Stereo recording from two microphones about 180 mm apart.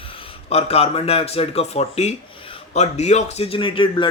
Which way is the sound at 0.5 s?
35° left (ahead or behind).